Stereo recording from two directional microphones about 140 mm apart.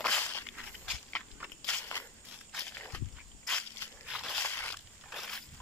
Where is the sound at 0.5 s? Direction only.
Centre (ahead or behind).